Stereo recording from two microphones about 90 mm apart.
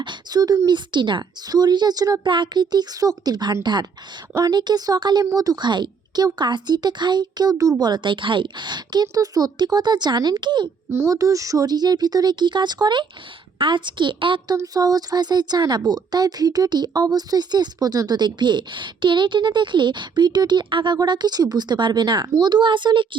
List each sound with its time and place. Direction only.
0.0 s speech: 55° right (ahead or behind)
1.5 s speech: 50° right (ahead or behind)
2.2 s speech: 60° right (ahead or behind)
10.9 s speech: 35° right (ahead or behind); by 14.4 s 65° right (ahead or behind)
14.4 s speech: 40° right (ahead or behind); by 23.0 s 60° right (ahead or behind)